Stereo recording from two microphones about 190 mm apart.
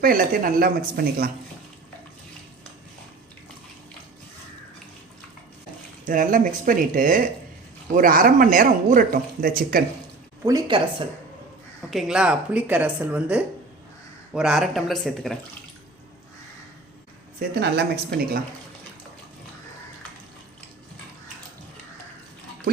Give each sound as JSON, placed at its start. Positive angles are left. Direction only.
{"t": 0.0, "sound": "speech", "side_deg": -50}
{"t": 6.1, "sound": "speech", "side_deg": -45}
{"t": 10.4, "sound": "speech", "side_deg": -20}
{"t": 11.9, "sound": "speech", "side_deg": 0}
{"t": 17.5, "sound": "speech", "side_deg": -60}